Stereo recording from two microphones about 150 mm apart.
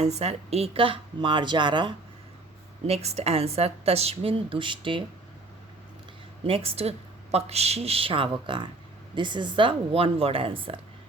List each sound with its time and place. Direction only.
0.0 s speech: 45° right (ahead or behind)
2.8 s speech: 45° right (ahead or behind)
6.4 s speech: 40° right (ahead or behind)